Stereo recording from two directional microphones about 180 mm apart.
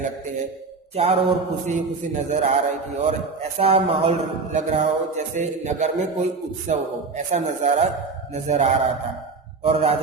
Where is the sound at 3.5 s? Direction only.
35° right (ahead or behind).